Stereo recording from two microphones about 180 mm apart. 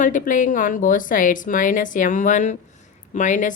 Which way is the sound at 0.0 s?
45° left (ahead or behind).